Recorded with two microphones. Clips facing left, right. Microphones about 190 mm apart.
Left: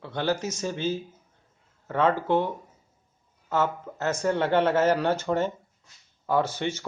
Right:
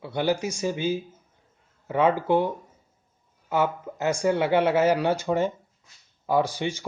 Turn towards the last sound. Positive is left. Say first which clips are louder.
# right 1 dB
turn(degrees=-10)  # may be behind; listen again after turning